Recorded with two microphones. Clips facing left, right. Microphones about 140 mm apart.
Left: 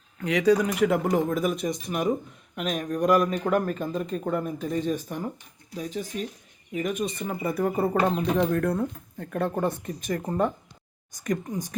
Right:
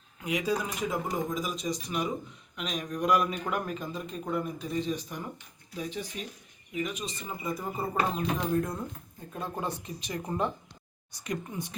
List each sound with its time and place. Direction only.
0.2 s a man's voice: 70° left (ahead or behind); by 11.7 s 40° left (ahead or behind)